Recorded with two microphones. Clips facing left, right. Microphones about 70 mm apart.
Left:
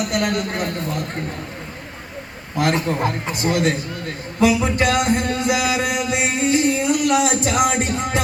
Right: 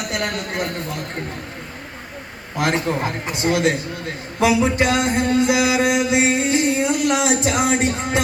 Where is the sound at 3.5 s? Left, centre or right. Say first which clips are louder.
Right 1 dB; right.